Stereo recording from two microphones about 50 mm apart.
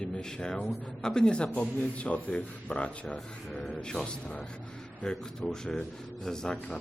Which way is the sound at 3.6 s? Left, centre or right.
Centre.